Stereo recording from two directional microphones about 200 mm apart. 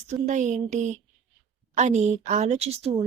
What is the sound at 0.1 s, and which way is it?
A woman's voice, 35° right (ahead or behind).